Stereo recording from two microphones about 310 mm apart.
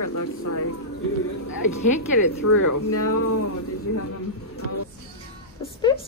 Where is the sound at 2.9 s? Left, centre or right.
Left.